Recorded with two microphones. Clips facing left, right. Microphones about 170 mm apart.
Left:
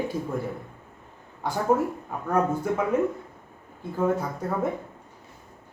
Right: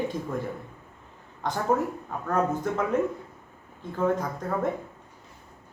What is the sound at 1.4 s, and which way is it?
Speech, 10° left (ahead or behind).